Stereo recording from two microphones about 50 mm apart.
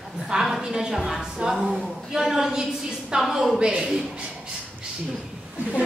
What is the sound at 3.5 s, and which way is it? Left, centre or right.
Speech, centre.